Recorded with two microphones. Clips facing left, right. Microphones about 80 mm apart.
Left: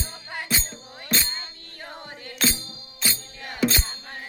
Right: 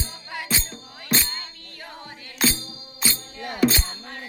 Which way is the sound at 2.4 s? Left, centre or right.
Centre.